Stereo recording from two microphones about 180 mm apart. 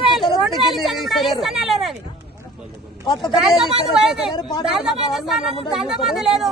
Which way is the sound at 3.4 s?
Centre (ahead or behind).